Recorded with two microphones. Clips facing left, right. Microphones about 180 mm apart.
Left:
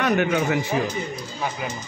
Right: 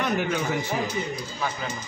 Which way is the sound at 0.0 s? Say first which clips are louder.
Left 5 dB; 75° left (ahead or behind).